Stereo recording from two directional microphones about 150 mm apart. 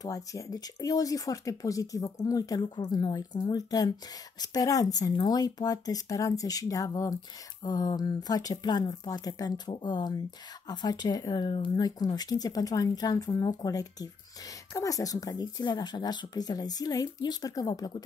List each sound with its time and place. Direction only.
0.0 s speech: 20° left (ahead or behind)